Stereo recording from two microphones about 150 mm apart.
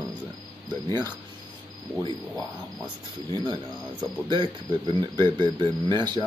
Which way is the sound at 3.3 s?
35° right (ahead or behind).